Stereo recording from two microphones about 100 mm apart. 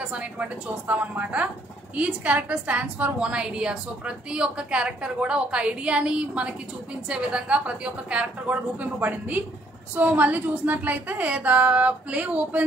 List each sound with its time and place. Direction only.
0.1 s a woman's voice: 15° right (ahead or behind)